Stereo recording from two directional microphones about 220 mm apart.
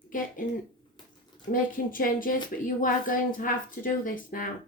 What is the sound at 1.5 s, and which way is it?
Speech, 40° left (ahead or behind).